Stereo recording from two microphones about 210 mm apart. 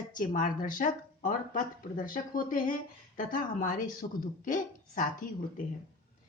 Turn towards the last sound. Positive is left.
turn(degrees=40)  # may be behind; listen again after turning